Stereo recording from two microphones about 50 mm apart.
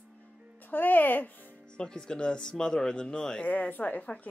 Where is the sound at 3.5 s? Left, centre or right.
Left.